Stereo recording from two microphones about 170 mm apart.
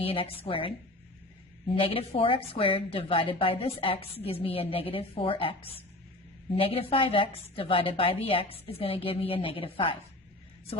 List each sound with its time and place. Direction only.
0.0 s a woman's voice: 35° left (ahead or behind)
6.6 s a woman's voice: 35° left (ahead or behind)